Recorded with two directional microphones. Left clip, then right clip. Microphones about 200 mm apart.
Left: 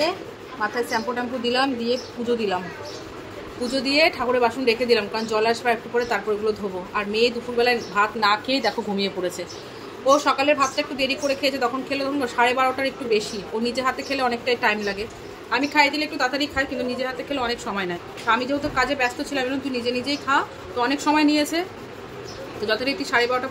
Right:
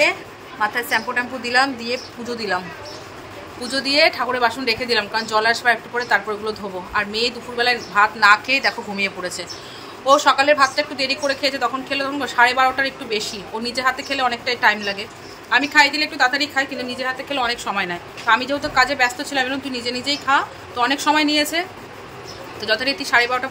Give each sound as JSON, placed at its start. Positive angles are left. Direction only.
{"t": 0.8, "sound": "a woman's voice", "side_deg": -5}
{"t": 3.7, "sound": "a woman's voice", "side_deg": 5}
{"t": 8.5, "sound": "speech", "side_deg": 30}
{"t": 10.0, "sound": "a woman's voice", "side_deg": 0}